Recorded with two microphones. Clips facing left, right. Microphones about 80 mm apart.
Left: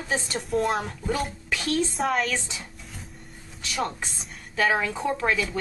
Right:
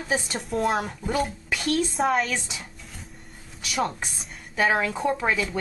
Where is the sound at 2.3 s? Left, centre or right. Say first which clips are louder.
Even; centre.